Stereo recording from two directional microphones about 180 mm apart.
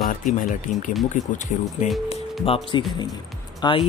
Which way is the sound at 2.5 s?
35° left (ahead or behind).